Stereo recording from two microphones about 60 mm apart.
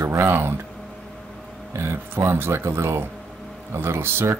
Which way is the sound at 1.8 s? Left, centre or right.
Right.